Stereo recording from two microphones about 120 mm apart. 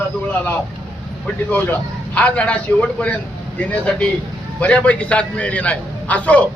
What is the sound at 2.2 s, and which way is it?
A man's voice, 10° left (ahead or behind).